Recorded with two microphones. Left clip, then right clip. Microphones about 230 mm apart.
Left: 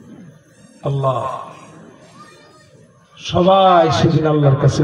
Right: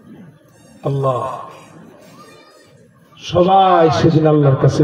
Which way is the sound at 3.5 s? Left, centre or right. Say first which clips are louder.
Left 1 dB; left.